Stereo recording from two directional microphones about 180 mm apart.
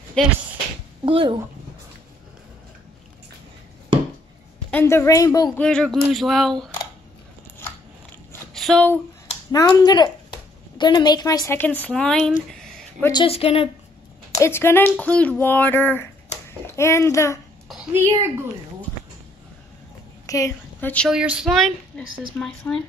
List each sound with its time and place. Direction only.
0.2 s speech: 5° left (ahead or behind)
1.0 s speech: 30° right (ahead or behind)
4.6 s speech: 10° left (ahead or behind)
5.6 s speech: 5° left (ahead or behind)
7.6 s a sound: 15° left (ahead or behind)
8.5 s speech: 5° left (ahead or behind)
9.5 s speech: 20° left (ahead or behind); by 12.4 s 5° left (ahead or behind)
13.0 s speech: 25° left (ahead or behind)
14.4 s a child's voice: 15° left (ahead or behind)
17.9 s a woman's voice: 15° right (ahead or behind)
20.2 s a woman's voice: 15° left (ahead or behind)
21.1 s speech: 5° right (ahead or behind)
22.3 s speech: 10° left (ahead or behind)